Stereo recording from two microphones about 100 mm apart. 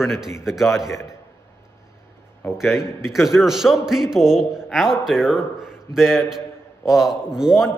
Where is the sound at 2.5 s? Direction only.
5° right (ahead or behind).